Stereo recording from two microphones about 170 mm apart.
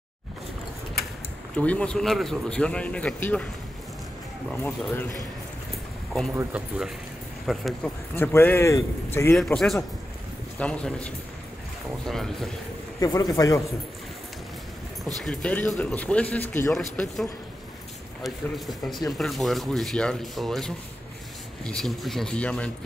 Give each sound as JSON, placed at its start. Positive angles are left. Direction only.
{"t": 1.6, "sound": "speech", "side_deg": 5}
{"t": 4.5, "sound": "speech", "side_deg": 10}
{"t": 6.3, "sound": "speech", "side_deg": -10}
{"t": 8.2, "sound": "speech", "side_deg": 15}
{"t": 9.4, "sound": "speech", "side_deg": 0}
{"t": 13.0, "sound": "speech", "side_deg": 20}
{"t": 15.1, "sound": "speech", "side_deg": 5}